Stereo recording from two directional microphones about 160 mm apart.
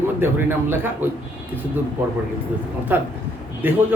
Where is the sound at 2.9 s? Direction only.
10° right (ahead or behind).